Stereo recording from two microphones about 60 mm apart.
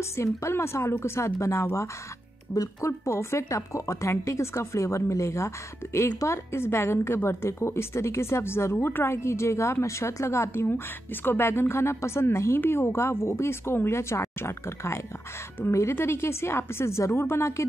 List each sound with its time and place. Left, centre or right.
0.0 s a woman's voice: left
2.5 s speech: left
3.1 s a woman's voice: left